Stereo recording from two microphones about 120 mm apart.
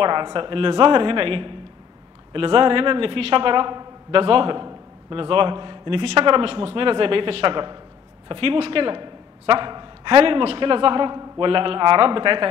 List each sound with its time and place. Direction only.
0.0 s a man's voice: 40° right (ahead or behind)